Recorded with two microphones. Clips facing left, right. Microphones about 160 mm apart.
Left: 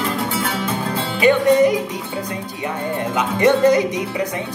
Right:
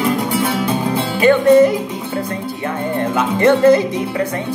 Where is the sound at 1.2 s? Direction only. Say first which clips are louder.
Right 4 dB; 15° left (ahead or behind).